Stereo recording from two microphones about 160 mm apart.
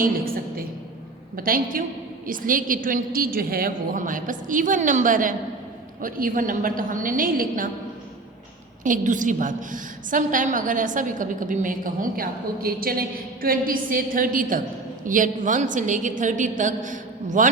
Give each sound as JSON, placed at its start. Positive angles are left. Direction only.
{"t": 0.0, "sound": "a woman's voice", "side_deg": -65}
{"t": 8.8, "sound": "a woman's voice", "side_deg": -55}